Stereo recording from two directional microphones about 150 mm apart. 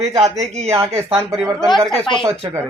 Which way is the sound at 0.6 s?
15° right (ahead or behind).